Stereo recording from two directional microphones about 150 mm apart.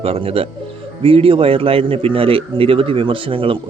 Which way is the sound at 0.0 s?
40° right (ahead or behind).